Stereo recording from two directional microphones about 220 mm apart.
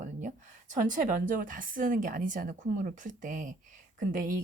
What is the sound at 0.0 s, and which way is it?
A woman's voice, 35° right (ahead or behind).